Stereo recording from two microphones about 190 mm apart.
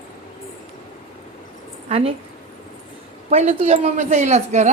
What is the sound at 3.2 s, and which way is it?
A woman's voice, 35° right (ahead or behind).